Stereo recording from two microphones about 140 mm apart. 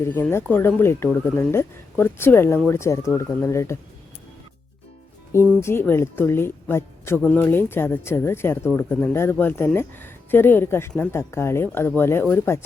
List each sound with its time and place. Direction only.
0.0 s speech: 15° left (ahead or behind)
5.6 s speech: 15° left (ahead or behind)